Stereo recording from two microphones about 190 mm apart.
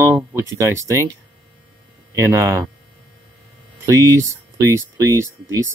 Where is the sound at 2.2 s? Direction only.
15° right (ahead or behind).